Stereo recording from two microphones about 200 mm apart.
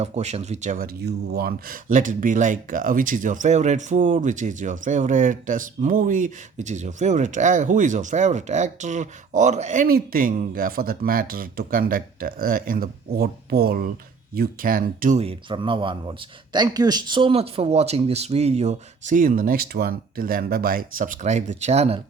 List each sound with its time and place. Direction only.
0.0 s speech: 35° right (ahead or behind)
1.0 s speech: 50° right (ahead or behind)
15.2 s speech: 25° right (ahead or behind)